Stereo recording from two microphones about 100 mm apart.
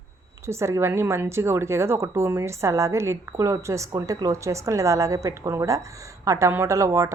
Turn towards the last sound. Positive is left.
turn(degrees=-30)  # may be behind; listen again after turning